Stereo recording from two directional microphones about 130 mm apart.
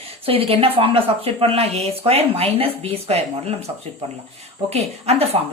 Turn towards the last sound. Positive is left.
turn(degrees=-50)  # may be behind; listen again after turning